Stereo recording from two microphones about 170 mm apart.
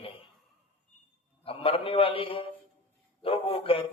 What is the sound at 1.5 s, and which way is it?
A man's voice, 35° left (ahead or behind).